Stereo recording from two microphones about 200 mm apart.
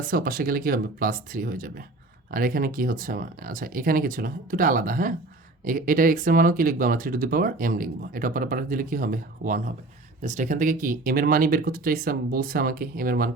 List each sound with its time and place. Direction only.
0.1 s speech: 45° right (ahead or behind)